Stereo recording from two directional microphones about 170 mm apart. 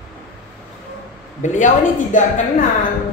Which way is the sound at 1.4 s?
45° left (ahead or behind).